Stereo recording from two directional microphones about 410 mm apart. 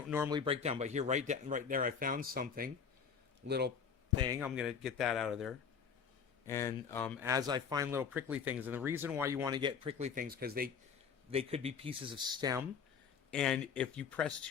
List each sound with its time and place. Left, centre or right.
0.1 s speech: centre; by 3.7 s right
4.2 s speech: centre
7.3 s speech: centre
13.3 s speech: centre